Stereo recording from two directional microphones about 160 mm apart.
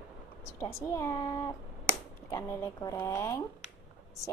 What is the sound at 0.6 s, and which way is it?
A woman's voice, 20° left (ahead or behind).